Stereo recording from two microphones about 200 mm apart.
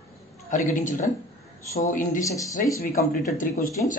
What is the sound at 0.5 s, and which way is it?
A man's voice, 40° left (ahead or behind).